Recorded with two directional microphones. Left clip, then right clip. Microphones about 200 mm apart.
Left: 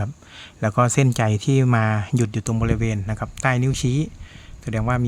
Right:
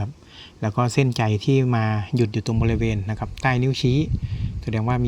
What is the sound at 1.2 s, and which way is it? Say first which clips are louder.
Speech: even; 10° left (ahead or behind).